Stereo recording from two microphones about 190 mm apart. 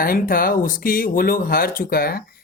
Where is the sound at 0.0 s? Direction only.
50° left (ahead or behind).